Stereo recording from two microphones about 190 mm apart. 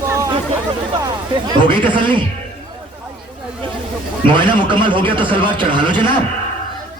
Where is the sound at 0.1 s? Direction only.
15° right (ahead or behind).